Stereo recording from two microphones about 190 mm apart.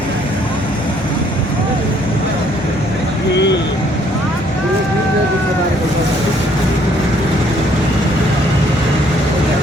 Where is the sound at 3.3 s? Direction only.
65° left (ahead or behind).